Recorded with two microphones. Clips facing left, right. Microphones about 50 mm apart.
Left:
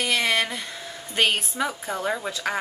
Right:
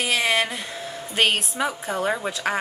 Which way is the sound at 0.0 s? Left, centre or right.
Centre.